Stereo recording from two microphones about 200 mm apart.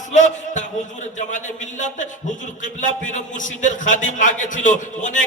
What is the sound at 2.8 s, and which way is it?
A man's voice, 40° left (ahead or behind).